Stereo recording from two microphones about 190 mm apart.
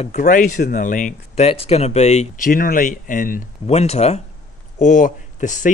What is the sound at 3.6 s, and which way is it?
Speech, 35° left (ahead or behind).